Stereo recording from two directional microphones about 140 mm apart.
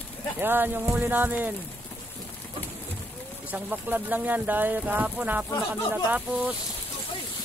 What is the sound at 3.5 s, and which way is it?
Speech, 10° right (ahead or behind).